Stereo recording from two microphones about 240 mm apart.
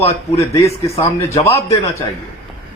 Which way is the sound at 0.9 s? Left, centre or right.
Left.